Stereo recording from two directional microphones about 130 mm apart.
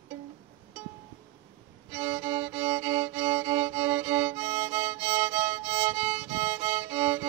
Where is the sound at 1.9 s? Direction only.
20° right (ahead or behind).